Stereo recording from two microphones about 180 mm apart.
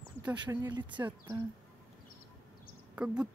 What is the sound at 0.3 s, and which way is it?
Speech, 20° right (ahead or behind).